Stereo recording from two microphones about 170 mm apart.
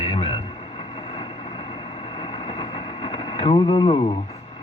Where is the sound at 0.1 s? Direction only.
35° left (ahead or behind).